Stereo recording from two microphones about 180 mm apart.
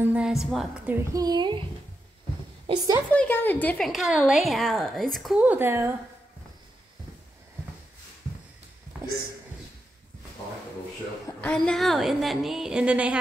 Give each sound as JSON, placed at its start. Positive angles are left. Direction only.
{"t": 0.0, "sound": "a woman's voice", "side_deg": -5}
{"t": 1.1, "sound": "speech", "side_deg": -20}
{"t": 2.6, "sound": "a child's voice", "side_deg": -25}
{"t": 3.1, "sound": "a woman's voice", "side_deg": 10}
{"t": 11.2, "sound": "a woman's voice", "side_deg": 5}